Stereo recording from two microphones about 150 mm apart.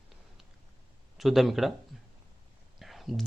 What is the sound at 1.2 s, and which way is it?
Speech, centre (ahead or behind).